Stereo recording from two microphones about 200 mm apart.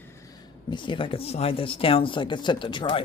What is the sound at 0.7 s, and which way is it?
Speech, 25° left (ahead or behind).